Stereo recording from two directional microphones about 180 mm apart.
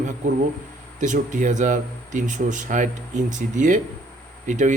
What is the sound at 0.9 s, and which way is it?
Speech, 45° right (ahead or behind).